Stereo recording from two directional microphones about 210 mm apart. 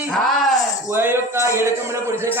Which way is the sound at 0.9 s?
10° right (ahead or behind).